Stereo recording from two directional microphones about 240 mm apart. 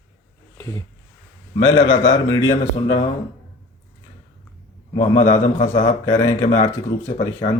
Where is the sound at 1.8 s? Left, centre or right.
Left.